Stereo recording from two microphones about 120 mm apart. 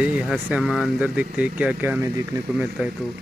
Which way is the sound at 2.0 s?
30° right (ahead or behind).